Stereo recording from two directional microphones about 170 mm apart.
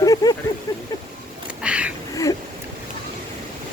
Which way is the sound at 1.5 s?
5° right (ahead or behind).